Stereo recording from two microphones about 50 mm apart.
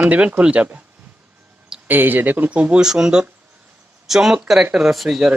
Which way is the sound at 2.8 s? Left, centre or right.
Centre.